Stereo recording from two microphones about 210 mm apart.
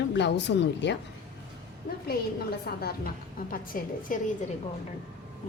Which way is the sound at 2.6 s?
45° left (ahead or behind).